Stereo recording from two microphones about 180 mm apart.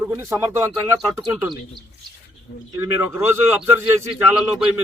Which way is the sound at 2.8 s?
15° right (ahead or behind).